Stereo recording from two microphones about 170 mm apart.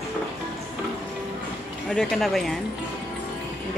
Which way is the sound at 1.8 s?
Centre (ahead or behind).